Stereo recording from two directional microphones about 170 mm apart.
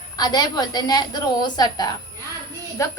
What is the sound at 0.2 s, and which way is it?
A woman's voice, 25° left (ahead or behind).